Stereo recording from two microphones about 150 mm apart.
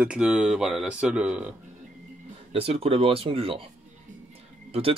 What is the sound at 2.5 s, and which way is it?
Speech, 40° right (ahead or behind).